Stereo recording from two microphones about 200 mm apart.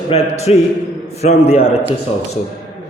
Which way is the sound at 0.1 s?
30° left (ahead or behind).